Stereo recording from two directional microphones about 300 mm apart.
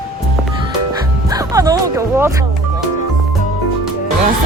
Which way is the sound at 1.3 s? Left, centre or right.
Centre.